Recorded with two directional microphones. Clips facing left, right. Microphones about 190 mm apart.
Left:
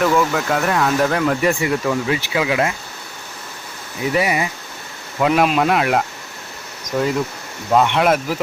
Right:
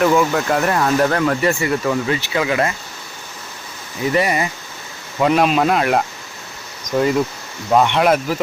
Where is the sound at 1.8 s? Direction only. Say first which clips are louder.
Right 1 dB; centre (ahead or behind).